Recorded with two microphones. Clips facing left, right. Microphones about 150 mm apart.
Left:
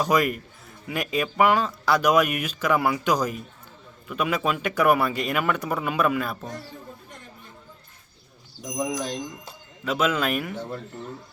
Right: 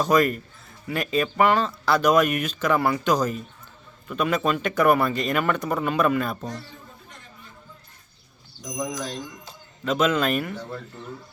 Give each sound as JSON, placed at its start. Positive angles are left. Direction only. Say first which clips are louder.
{"t": 0.0, "sound": "speech", "louder": "right 2 dB", "side_deg": 10}
{"t": 8.7, "sound": "speech", "louder": "left 2 dB", "side_deg": 15}
{"t": 9.8, "sound": "speech", "louder": "right 2 dB", "side_deg": 10}
{"t": 10.5, "sound": "speech", "louder": "left 2 dB", "side_deg": 15}